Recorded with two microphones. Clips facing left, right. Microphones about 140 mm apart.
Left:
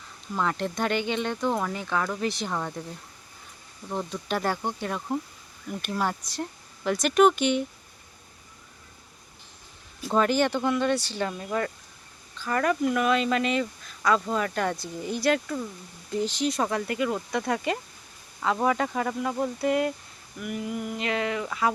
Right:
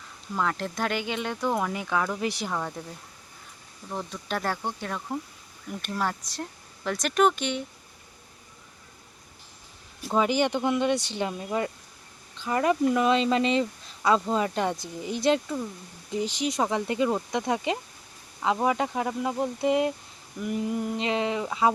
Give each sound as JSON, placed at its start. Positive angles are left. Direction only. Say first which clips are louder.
{"t": 0.3, "sound": "speech", "louder": "left 1 dB", "side_deg": 0}
{"t": 2.5, "sound": "speech", "louder": "even", "side_deg": 0}
{"t": 3.8, "sound": "speech", "louder": "left 3 dB", "side_deg": 0}
{"t": 10.1, "sound": "speech", "louder": "left 1 dB", "side_deg": -15}
{"t": 20.4, "sound": "speech", "louder": "right 3 dB", "side_deg": -30}